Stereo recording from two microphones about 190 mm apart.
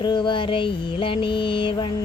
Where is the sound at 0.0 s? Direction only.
25° left (ahead or behind).